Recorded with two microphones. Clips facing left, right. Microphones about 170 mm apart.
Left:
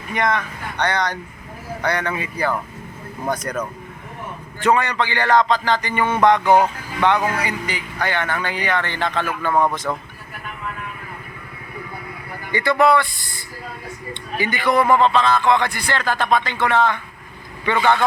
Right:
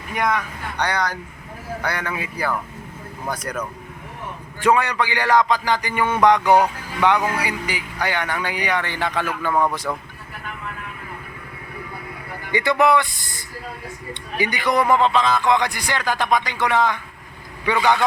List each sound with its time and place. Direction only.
0.1 s a man's voice: 5° right (ahead or behind)
4.6 s a man's voice: 10° right (ahead or behind)
9.9 s speech: centre (ahead or behind)
12.5 s a man's voice: 15° right (ahead or behind)
14.1 s a man's voice: 15° right (ahead or behind)